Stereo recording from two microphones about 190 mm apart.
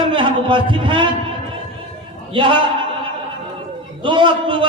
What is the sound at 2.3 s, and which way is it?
Speech, 25° right (ahead or behind).